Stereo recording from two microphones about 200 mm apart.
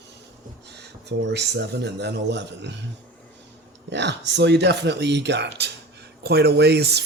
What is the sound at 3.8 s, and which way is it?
Speech, 60° right (ahead or behind).